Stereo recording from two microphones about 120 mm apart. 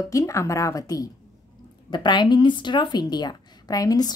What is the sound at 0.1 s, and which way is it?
A woman's voice, 25° left (ahead or behind).